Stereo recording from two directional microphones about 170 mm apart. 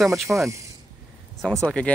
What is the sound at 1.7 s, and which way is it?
Speech, 5° left (ahead or behind).